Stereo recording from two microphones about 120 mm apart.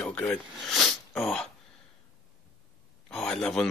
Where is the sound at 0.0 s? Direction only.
10° left (ahead or behind).